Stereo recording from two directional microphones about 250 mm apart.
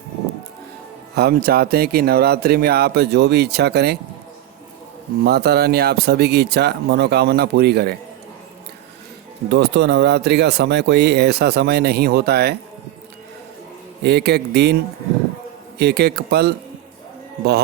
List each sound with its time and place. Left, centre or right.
1.1 s speech: right
5.2 s speech: right
9.5 s speech: right
14.0 s speech: right
15.8 s speech: right